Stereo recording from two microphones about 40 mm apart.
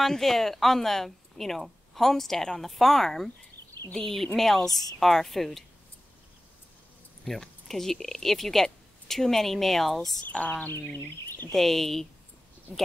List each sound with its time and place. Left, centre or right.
0.0 s a woman's voice: centre
7.2 s speech: centre
10.3 s speech: left
11.0 s speech: left
11.5 s a woman's voice: centre